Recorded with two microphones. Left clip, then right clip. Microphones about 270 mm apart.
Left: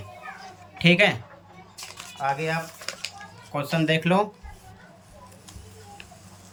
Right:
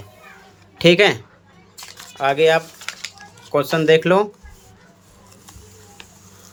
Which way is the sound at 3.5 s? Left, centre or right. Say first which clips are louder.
Right 10 dB; centre.